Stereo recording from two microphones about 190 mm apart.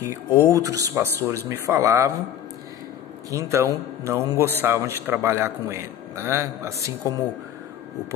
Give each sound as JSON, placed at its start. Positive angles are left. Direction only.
{"t": 0.4, "sound": "a man's voice", "side_deg": -15}
{"t": 3.3, "sound": "a man's voice", "side_deg": -15}